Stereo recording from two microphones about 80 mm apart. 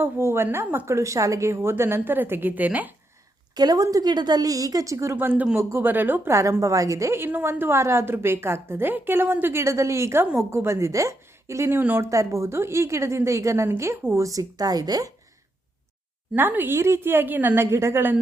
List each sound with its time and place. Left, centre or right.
0.0 s a woman's voice: right
0.9 s a woman's voice: right
3.5 s a woman's voice: right
5.1 s a woman's voice: right
6.3 s a woman's voice: right
12.0 s a woman's voice: right
16.3 s a woman's voice: right